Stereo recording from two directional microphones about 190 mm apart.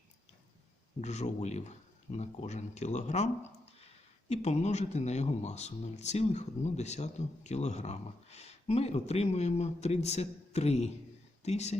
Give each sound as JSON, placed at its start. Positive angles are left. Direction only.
{"t": 1.0, "sound": "speech", "side_deg": 35}
{"t": 4.3, "sound": "speech", "side_deg": 35}